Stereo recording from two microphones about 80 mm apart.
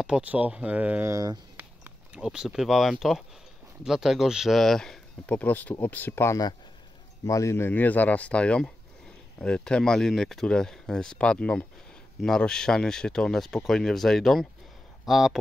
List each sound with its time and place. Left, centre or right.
0.0 s speech: centre
2.1 s speech: centre
5.2 s speech: centre
7.2 s speech: left; by 15.3 s centre